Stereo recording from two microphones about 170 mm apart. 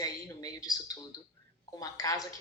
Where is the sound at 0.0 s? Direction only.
20° left (ahead or behind).